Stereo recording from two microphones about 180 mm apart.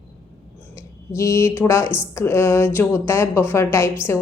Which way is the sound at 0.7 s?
15° left (ahead or behind).